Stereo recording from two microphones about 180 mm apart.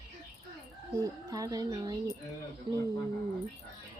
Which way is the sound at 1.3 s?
20° right (ahead or behind).